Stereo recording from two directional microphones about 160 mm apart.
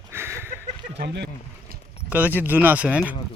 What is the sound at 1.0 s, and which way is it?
Speech, 90° right.